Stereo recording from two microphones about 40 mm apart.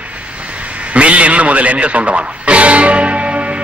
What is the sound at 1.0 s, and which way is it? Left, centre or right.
Speech, right.